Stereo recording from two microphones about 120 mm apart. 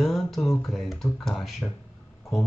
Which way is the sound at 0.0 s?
Centre (ahead or behind).